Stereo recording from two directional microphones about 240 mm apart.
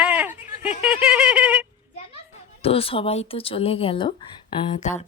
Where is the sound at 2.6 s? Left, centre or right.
Left.